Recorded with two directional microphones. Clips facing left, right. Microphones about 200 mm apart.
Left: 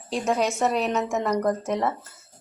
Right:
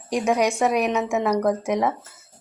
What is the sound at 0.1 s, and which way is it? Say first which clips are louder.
A woman's voice: right 3 dB; 15° right (ahead or behind).